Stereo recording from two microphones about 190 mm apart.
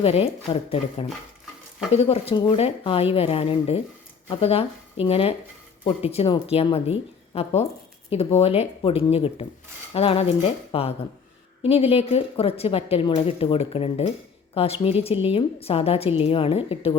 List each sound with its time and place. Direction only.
0.0 s a woman's voice: 30° left (ahead or behind)